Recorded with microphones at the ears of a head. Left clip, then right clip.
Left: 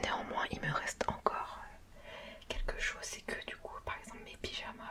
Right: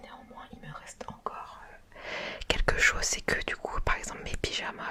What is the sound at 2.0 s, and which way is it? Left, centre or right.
Whispering, right.